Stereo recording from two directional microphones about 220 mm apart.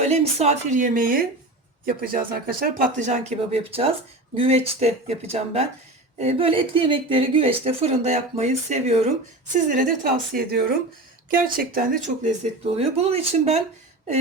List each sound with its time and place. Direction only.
0.0 s a woman's voice: 30° right (ahead or behind)